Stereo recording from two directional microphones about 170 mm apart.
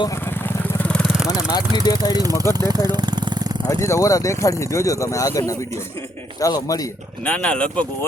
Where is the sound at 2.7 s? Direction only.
25° right (ahead or behind).